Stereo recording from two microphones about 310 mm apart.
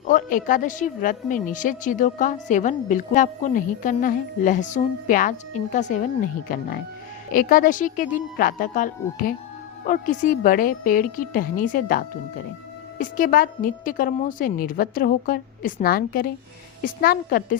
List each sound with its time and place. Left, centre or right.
0.1 s a woman's voice: left